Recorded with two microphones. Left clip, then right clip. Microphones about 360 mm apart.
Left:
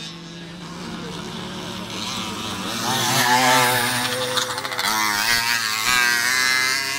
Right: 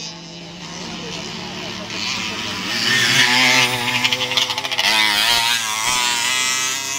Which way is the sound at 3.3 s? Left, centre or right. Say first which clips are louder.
Right 1 dB; left.